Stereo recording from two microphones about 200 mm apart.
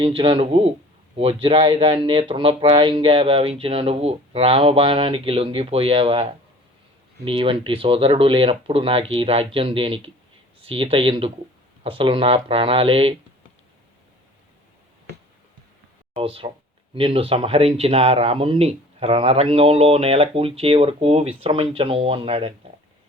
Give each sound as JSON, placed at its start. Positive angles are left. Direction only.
{"t": 0.2, "sound": "speech", "side_deg": -25}
{"t": 16.1, "sound": "speech", "side_deg": -25}